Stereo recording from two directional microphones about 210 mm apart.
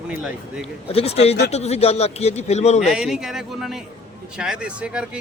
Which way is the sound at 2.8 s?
5° right (ahead or behind).